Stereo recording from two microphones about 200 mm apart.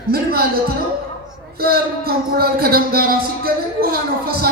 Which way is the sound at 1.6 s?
50° right (ahead or behind).